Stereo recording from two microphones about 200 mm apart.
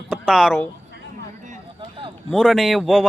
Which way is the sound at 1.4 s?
40° right (ahead or behind).